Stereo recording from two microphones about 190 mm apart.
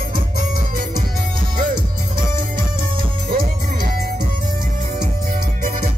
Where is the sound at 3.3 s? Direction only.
50° right (ahead or behind).